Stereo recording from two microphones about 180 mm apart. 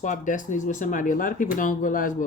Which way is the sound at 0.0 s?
45° left (ahead or behind).